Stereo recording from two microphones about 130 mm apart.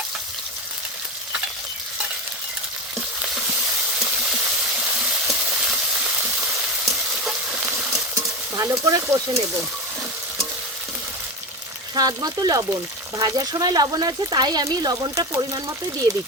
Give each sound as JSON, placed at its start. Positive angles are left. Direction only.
{"t": 4.0, "sound": "a sound", "side_deg": -5}
{"t": 5.3, "sound": "frying", "side_deg": 0}
{"t": 8.1, "sound": "stir", "side_deg": -25}
{"t": 11.9, "sound": "speech", "side_deg": -30}